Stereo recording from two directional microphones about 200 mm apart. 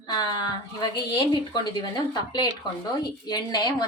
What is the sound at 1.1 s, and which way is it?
A woman's voice, 25° left (ahead or behind).